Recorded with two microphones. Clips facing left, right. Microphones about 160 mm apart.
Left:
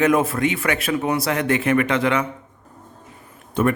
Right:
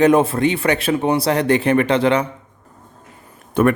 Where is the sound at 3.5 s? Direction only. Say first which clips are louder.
Right 4 dB; 60° right (ahead or behind).